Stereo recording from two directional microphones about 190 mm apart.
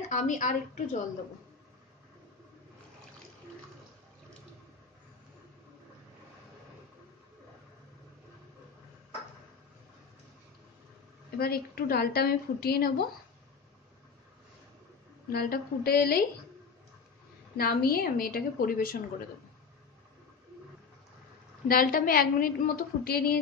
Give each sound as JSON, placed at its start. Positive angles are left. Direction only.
{"t": 0.1, "sound": "a woman's voice", "side_deg": 40}
{"t": 11.3, "sound": "a woman's voice", "side_deg": 55}
{"t": 15.2, "sound": "a woman's voice", "side_deg": 55}
{"t": 17.6, "sound": "a woman's voice", "side_deg": 55}
{"t": 21.6, "sound": "a woman's voice", "side_deg": 50}